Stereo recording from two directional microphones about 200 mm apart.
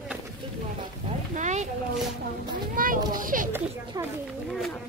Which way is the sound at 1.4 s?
35° right (ahead or behind).